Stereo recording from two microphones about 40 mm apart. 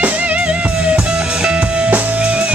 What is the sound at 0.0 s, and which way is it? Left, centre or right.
Music, right.